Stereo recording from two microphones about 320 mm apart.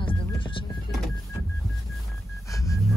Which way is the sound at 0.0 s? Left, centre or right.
Centre.